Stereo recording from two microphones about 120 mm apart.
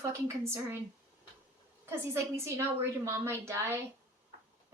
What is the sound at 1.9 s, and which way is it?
A woman's voice, 25° right (ahead or behind).